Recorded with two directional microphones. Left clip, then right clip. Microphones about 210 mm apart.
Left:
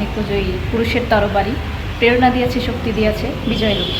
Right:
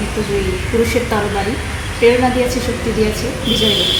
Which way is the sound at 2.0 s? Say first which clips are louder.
Right 3 dB; 20° left (ahead or behind).